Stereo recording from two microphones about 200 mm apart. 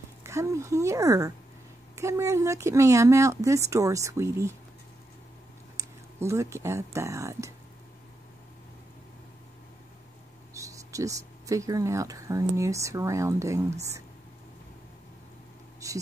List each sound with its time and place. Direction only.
0.2 s speech: 15° right (ahead or behind)
5.8 s speech: 15° right (ahead or behind)
10.5 s speech: 15° right (ahead or behind)